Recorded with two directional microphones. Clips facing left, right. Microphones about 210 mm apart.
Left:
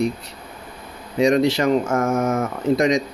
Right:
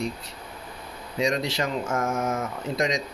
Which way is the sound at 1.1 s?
60° left (ahead or behind).